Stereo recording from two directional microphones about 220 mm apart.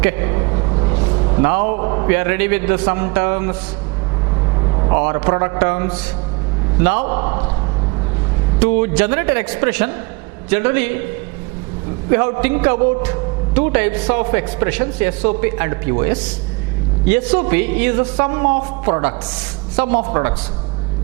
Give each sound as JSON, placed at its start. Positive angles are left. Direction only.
{"t": 0.0, "sound": "a sound", "side_deg": -15}
{"t": 1.5, "sound": "a man's voice", "side_deg": -15}
{"t": 1.8, "sound": "a man's voice", "side_deg": -25}
{"t": 2.1, "sound": "a man's voice", "side_deg": -15}
{"t": 4.9, "sound": "a man's voice", "side_deg": -15}
{"t": 8.5, "sound": "a man's voice", "side_deg": -10}
{"t": 12.1, "sound": "a man's voice", "side_deg": -10}